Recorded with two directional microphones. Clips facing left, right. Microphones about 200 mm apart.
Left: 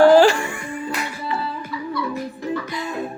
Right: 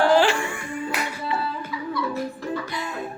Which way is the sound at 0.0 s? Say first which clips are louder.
Left 7 dB; 40° left (ahead or behind).